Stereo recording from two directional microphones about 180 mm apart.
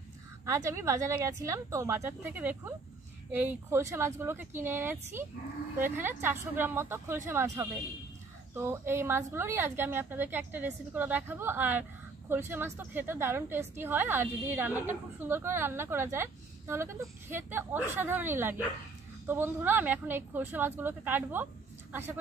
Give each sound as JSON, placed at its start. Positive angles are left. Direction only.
{"t": 0.7, "sound": "a woman's voice", "side_deg": -15}